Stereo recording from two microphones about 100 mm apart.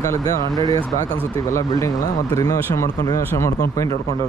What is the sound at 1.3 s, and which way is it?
Speech, 35° left (ahead or behind).